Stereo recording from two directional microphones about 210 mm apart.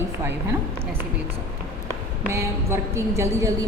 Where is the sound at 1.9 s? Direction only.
15° right (ahead or behind).